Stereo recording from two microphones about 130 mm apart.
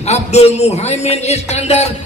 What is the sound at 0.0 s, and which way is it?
A man's voice, 55° left (ahead or behind).